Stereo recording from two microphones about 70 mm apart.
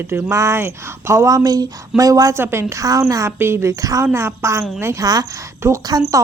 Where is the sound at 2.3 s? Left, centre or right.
Right.